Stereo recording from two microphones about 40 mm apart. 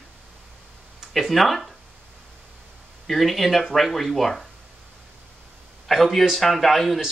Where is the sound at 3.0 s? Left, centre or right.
Centre.